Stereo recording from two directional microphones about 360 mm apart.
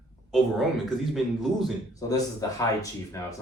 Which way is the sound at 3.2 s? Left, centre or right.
Centre.